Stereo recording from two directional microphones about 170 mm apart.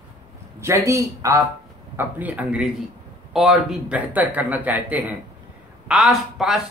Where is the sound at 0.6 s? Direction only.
15° right (ahead or behind).